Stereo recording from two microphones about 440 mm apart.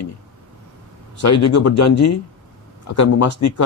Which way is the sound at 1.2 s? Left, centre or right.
Left.